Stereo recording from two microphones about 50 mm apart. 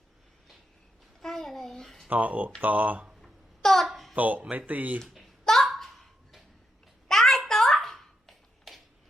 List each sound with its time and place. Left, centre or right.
1.2 s a child's voice: centre
2.0 s speech: right
3.1 s a sound: centre
4.1 s speech: right
4.9 s a child's voice: centre
5.6 s a sound: centre